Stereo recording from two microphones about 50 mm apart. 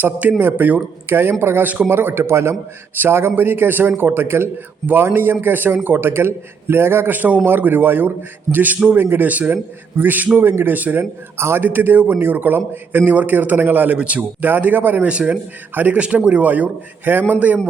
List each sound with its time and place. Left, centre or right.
0.0 s a man's voice: right
1.6 s a man's voice: right
1.9 s a man's voice: right
7.1 s a man's voice: right
9.0 s a man's voice: right
9.3 s a man's voice: right
11.3 s a man's voice: right
11.6 s a man's voice: right
14.0 s speech: right
14.4 s a man's voice: right
15.0 s speech: right
15.7 s a man's voice: right
16.0 s speech: right
17.1 s a man's voice: right